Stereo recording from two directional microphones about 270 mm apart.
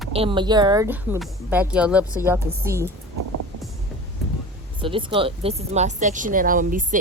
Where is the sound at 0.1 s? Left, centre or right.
Centre.